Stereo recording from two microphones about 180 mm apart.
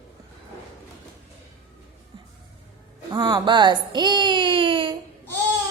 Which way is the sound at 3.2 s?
25° right (ahead or behind).